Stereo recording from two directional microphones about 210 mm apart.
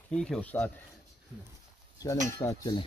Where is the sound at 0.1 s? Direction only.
5° left (ahead or behind).